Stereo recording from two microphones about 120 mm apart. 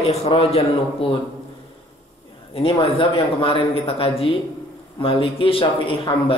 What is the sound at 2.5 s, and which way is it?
A man's voice, 50° left (ahead or behind).